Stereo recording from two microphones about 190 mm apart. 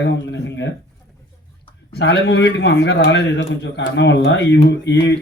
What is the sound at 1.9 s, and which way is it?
Speech, 60° left (ahead or behind).